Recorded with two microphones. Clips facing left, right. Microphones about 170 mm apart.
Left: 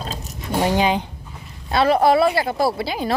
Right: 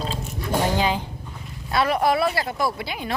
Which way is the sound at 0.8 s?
20° left (ahead or behind).